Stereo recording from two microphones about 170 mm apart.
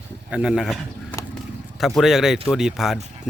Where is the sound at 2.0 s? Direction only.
Centre (ahead or behind).